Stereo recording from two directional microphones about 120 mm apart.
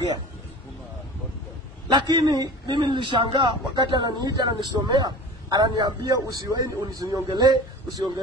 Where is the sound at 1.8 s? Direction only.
35° right (ahead or behind).